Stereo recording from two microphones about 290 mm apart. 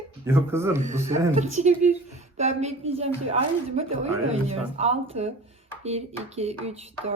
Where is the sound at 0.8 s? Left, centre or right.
Right.